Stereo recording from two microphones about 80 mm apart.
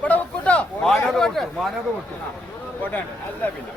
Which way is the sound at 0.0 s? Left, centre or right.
Centre.